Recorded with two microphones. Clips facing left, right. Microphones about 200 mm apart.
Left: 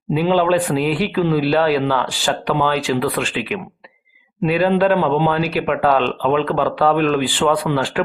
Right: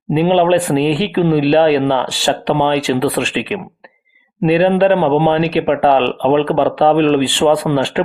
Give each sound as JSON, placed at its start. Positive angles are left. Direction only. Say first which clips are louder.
{"t": 0.1, "sound": "speech", "louder": "right 4 dB", "side_deg": -25}